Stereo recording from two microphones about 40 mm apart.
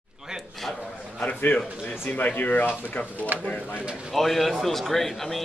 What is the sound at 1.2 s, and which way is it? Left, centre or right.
A man's voice, left.